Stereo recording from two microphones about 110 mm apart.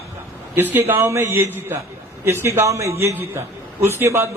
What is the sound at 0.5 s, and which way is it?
A man's voice, 20° right (ahead or behind).